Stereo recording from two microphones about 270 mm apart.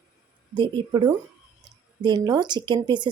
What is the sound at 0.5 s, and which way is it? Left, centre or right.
A woman's voice, centre.